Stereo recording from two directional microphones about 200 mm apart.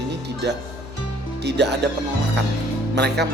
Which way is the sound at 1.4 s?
60° right (ahead or behind).